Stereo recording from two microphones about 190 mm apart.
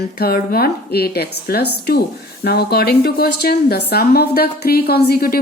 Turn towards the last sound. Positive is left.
turn(degrees=50)  # may be behind; listen again after turning